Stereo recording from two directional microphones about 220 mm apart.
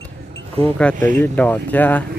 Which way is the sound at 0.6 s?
5° left (ahead or behind).